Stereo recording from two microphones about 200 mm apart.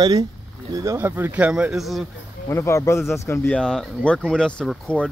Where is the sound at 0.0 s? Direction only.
20° right (ahead or behind); by 2.0 s centre (ahead or behind).